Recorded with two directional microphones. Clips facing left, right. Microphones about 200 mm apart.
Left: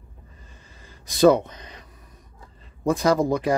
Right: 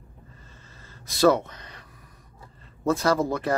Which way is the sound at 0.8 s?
15° left (ahead or behind).